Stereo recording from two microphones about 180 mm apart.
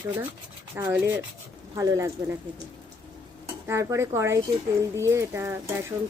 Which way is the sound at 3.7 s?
15° right (ahead or behind).